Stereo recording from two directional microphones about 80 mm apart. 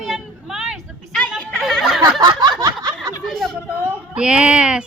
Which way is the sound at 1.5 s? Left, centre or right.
Centre.